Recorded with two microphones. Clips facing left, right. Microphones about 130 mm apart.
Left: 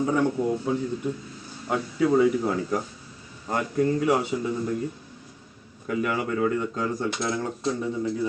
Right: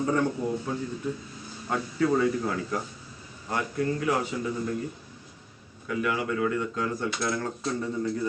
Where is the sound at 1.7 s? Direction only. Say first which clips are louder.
Left 3 dB; 10° left (ahead or behind).